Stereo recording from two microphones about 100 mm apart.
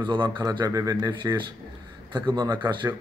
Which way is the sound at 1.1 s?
50° right (ahead or behind).